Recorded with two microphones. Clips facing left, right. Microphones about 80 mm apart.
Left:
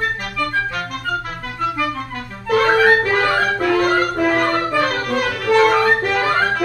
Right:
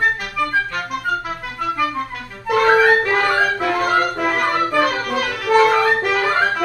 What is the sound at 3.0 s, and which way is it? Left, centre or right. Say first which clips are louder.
Music: even; centre.